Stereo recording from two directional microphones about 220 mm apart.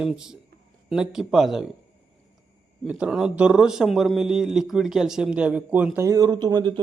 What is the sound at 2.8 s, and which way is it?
A man's voice, centre (ahead or behind).